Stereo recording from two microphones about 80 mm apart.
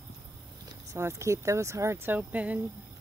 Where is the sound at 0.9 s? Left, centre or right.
Right.